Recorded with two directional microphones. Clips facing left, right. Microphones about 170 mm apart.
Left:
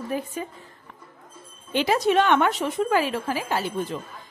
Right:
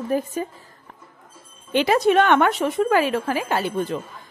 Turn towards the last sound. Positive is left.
turn(degrees=-60)  # may be behind; listen again after turning